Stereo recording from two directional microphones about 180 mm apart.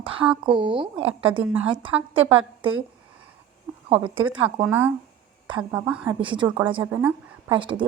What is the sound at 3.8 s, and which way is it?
Speech, 30° right (ahead or behind).